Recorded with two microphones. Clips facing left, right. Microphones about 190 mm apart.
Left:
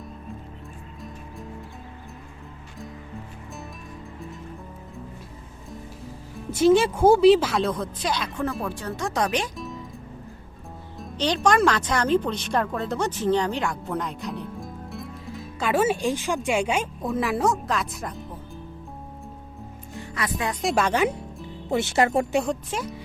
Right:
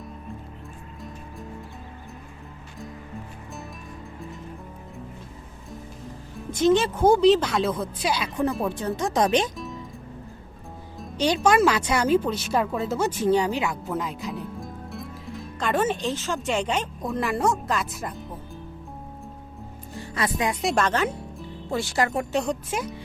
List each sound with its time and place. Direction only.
6.5 s a woman's voice: 5° left (ahead or behind); by 8.4 s 10° right (ahead or behind)
8.6 s speech: 20° right (ahead or behind)
9.6 s music: centre (ahead or behind)
11.2 s speech: 10° right (ahead or behind)
20.0 s music: 30° right (ahead or behind)
20.4 s speech: 5° right (ahead or behind); by 21.1 s 10° left (ahead or behind)
21.7 s speech: 20° left (ahead or behind)
22.3 s a woman's voice: 5° left (ahead or behind)